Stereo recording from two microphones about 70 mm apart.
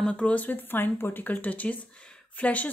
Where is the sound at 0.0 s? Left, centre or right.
Centre.